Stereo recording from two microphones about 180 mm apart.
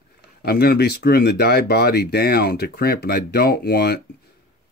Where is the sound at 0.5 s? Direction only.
60° left (ahead or behind).